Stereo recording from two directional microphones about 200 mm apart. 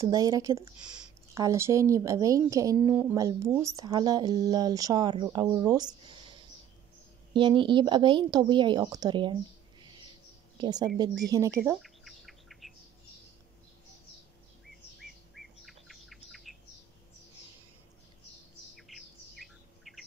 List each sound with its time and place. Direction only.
0.0 s speech: 20° right (ahead or behind)
6.0 s a sound: 25° right (ahead or behind)
7.3 s speech: 25° right (ahead or behind)
10.6 s a woman's voice: 20° right (ahead or behind)
11.8 s bird: centre (ahead or behind)
15.0 s bird: centre (ahead or behind)
18.8 s bird: centre (ahead or behind)